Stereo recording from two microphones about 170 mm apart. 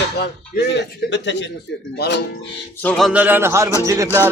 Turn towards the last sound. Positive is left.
turn(degrees=-20)  # may be behind; listen again after turning